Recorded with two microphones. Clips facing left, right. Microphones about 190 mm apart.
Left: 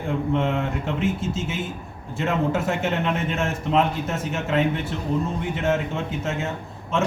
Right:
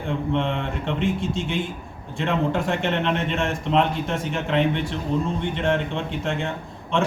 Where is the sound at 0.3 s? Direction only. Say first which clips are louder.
Left 1 dB; 5° left (ahead or behind).